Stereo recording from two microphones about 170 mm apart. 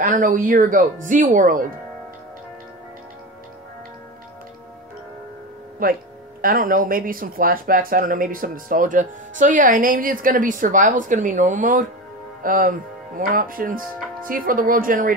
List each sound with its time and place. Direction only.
0.0 s speech: 50° right (ahead or behind)
5.8 s speech: 55° right (ahead or behind)